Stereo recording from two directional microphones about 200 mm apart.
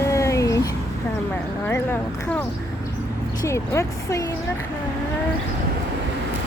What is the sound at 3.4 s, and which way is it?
Vehicle, 15° left (ahead or behind).